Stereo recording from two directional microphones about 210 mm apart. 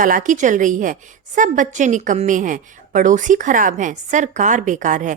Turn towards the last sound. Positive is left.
turn(degrees=-35)  # may be behind; listen again after turning